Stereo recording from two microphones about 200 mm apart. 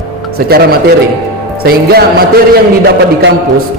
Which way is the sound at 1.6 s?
50° right (ahead or behind).